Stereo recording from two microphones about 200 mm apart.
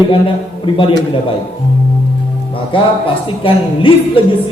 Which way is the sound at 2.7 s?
25° left (ahead or behind).